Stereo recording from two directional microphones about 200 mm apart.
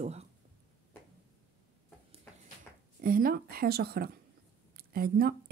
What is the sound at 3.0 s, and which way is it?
A woman's voice, 45° right (ahead or behind).